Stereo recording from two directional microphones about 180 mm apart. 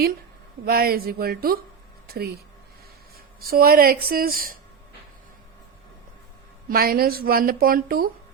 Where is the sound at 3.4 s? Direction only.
55° right (ahead or behind).